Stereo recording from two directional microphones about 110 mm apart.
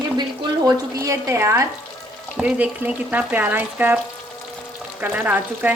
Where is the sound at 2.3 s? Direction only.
10° right (ahead or behind).